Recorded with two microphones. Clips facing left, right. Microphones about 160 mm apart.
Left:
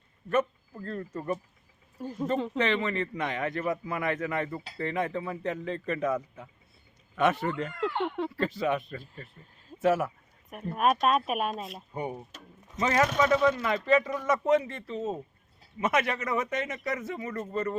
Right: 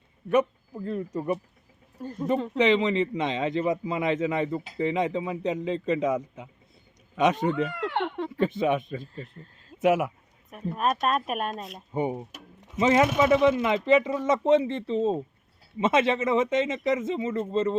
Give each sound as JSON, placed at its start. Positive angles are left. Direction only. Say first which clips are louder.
{"t": 0.3, "sound": "speech", "louder": "right 4 dB", "side_deg": -15}
{"t": 2.0, "sound": "speech", "louder": "right 1 dB", "side_deg": 5}
{"t": 2.6, "sound": "a man's voice", "louder": "right 10 dB", "side_deg": -15}
{"t": 7.7, "sound": "speech", "louder": "right 1 dB", "side_deg": -70}
{"t": 8.4, "sound": "a man's voice", "louder": "right 6 dB", "side_deg": -20}
{"t": 10.5, "sound": "speech", "louder": "left 1 dB", "side_deg": 5}
{"t": 11.9, "sound": "a man's voice", "louder": "right 7 dB", "side_deg": -20}